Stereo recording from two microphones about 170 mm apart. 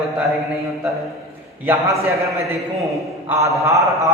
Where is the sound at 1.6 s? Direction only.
15° right (ahead or behind).